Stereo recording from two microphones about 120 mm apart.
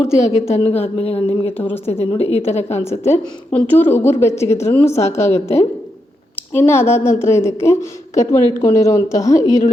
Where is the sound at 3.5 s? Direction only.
15° left (ahead or behind).